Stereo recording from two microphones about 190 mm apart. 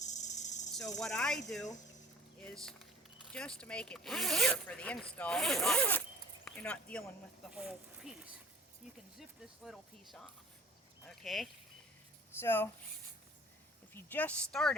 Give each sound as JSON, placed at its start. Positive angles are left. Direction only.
{"t": 0.0, "sound": "cricket", "side_deg": 40}
{"t": 0.9, "sound": "speech", "side_deg": 5}
{"t": 2.4, "sound": "speech", "side_deg": 5}
{"t": 7.5, "sound": "speech", "side_deg": -5}
{"t": 9.6, "sound": "speech", "side_deg": 0}
{"t": 12.4, "sound": "speech", "side_deg": 10}
{"t": 13.9, "sound": "speech", "side_deg": 10}